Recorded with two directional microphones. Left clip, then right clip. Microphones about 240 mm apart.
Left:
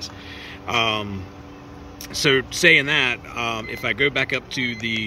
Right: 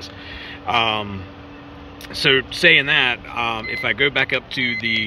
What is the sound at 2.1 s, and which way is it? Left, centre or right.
Speech, centre.